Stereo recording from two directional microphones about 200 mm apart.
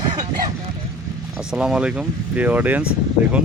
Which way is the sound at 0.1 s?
25° right (ahead or behind).